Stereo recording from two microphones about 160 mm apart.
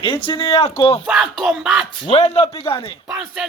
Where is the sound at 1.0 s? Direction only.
5° right (ahead or behind).